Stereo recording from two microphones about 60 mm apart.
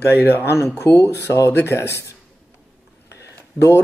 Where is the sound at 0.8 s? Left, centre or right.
Left.